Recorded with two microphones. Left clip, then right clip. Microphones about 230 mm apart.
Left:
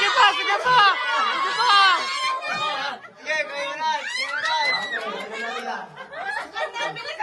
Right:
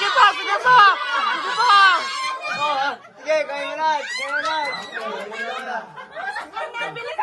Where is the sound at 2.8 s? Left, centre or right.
Centre.